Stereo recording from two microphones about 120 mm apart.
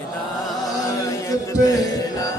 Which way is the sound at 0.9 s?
25° left (ahead or behind).